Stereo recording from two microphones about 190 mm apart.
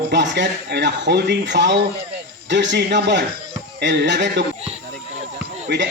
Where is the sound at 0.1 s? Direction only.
65° right (ahead or behind).